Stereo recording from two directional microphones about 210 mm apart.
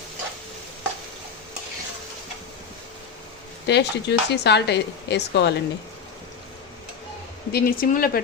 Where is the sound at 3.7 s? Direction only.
55° left (ahead or behind).